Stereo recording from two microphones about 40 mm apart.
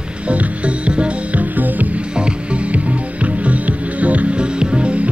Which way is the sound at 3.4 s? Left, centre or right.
Right.